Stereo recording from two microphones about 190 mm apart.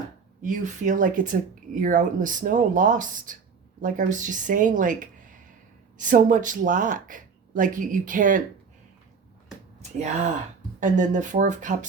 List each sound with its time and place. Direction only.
0.4 s speech: 40° right (ahead or behind)
10.8 s speech: 40° right (ahead or behind)